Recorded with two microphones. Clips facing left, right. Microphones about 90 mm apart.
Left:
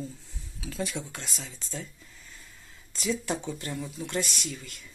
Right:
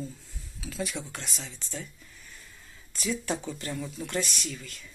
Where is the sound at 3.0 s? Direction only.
20° left (ahead or behind).